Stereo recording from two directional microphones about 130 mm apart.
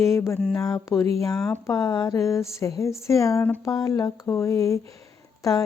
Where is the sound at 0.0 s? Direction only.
20° left (ahead or behind).